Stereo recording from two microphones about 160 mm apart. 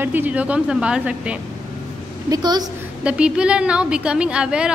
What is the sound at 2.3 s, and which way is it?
Speech, 25° right (ahead or behind).